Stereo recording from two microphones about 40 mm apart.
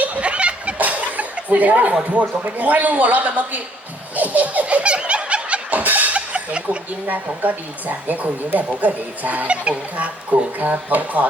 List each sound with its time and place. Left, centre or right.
0.0 s a sound: right
0.8 s chuckle: right
2.1 s a man's voice: right
4.1 s laughter: right
5.8 s a sound: right
6.1 s chuckle: right
7.1 s speech: right